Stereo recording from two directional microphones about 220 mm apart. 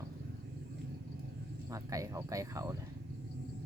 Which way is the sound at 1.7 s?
15° right (ahead or behind).